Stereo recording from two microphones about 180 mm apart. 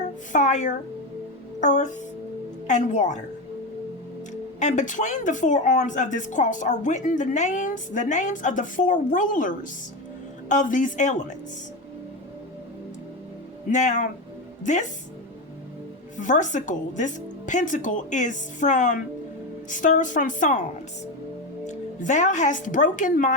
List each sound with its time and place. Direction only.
0.3 s a woman's voice: 45° left (ahead or behind)
4.6 s speech: 45° left (ahead or behind)
13.7 s speech: 40° left (ahead or behind)
16.1 s speech: 45° left (ahead or behind)
21.6 s a woman's voice: 40° left (ahead or behind)